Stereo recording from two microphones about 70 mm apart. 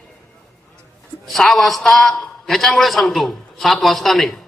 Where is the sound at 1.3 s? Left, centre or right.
Centre.